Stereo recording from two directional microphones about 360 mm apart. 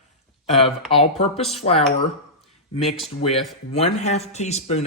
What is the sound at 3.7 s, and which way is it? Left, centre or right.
Speech, centre.